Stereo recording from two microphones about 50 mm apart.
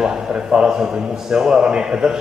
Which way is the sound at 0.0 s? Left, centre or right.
Centre.